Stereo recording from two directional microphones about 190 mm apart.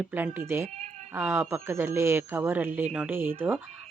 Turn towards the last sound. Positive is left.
turn(degrees=-10)  # may be behind; listen again after turning